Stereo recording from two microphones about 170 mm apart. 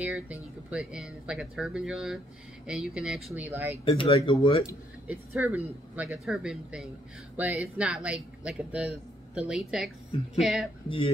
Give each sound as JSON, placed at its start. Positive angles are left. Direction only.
{"t": 0.0, "sound": "speech", "side_deg": -10}
{"t": 3.4, "sound": "speech", "side_deg": -10}
{"t": 3.7, "sound": "speech", "side_deg": 30}
{"t": 5.0, "sound": "speech", "side_deg": -10}